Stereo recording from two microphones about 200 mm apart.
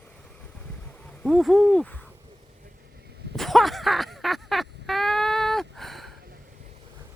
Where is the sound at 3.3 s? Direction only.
Centre (ahead or behind).